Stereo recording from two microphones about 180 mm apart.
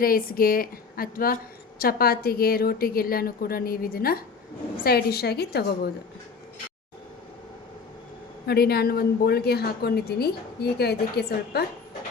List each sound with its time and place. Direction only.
0.0 s a woman's voice: 55° left (ahead or behind)
8.4 s a woman's voice: 60° left (ahead or behind)